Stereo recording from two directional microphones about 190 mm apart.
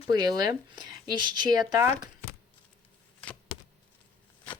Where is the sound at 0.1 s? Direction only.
20° right (ahead or behind).